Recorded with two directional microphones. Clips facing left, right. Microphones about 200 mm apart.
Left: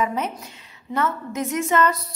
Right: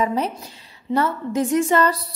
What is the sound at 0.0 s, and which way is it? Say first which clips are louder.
A woman's voice: right 3 dB; 35° right (ahead or behind).